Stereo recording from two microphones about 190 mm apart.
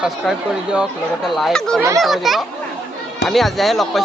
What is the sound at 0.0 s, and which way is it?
Speech, 5° right (ahead or behind).